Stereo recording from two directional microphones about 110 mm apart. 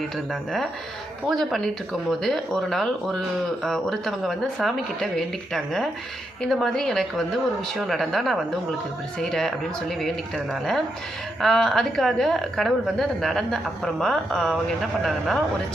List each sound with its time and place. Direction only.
1.3 s speech: centre (ahead or behind)